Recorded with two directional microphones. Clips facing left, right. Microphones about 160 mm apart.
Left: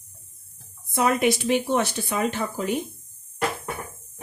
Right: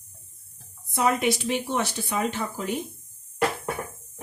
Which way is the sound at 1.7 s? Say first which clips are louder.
Left 3 dB; 55° left (ahead or behind).